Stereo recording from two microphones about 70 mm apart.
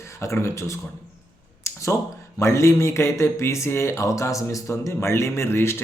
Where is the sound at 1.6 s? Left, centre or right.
Left.